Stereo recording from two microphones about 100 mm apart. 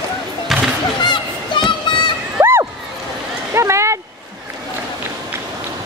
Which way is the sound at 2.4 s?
25° right (ahead or behind).